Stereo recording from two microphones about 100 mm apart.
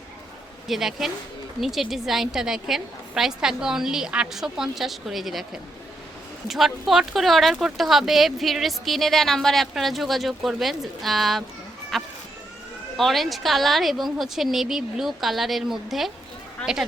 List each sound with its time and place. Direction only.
0.7 s speech: 5° right (ahead or behind)
6.5 s speech: centre (ahead or behind)